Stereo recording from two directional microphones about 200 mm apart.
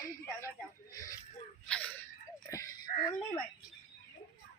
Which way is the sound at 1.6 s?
5° left (ahead or behind).